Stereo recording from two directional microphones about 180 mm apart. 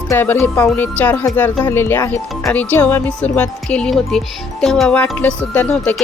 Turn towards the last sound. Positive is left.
turn(degrees=5)  # may be behind; listen again after turning